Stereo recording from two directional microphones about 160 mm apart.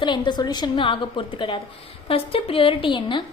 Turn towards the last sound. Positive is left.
turn(degrees=30)  # may be behind; listen again after turning